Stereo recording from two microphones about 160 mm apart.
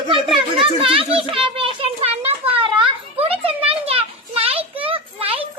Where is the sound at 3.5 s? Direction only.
35° right (ahead or behind).